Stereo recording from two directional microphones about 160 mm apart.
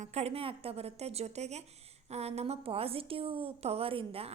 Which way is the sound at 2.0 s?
40° right (ahead or behind).